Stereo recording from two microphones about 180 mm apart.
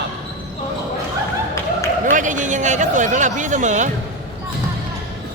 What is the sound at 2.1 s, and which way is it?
Speech, 45° right (ahead or behind).